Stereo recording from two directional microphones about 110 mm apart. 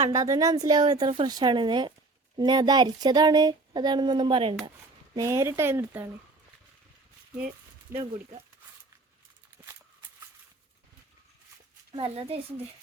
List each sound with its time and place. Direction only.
0.1 s speech: 30° right (ahead or behind); by 4.5 s 50° right (ahead or behind)
5.1 s speech: 30° right (ahead or behind)
7.9 s speech: 20° right (ahead or behind)
11.9 s speech: 60° right (ahead or behind)